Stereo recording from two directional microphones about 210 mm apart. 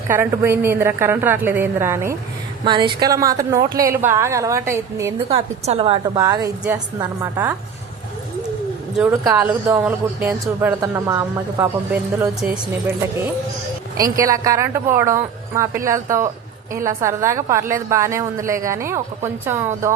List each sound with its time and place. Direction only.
0.1 s speech: 10° right (ahead or behind)
5.3 s a woman's voice: 30° right (ahead or behind)
6.1 s speech: 15° right (ahead or behind)
9.2 s speech: 10° right (ahead or behind)
14.0 s speech: 15° right (ahead or behind)